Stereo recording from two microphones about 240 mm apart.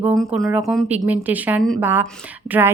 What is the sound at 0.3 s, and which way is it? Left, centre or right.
A woman's voice, centre.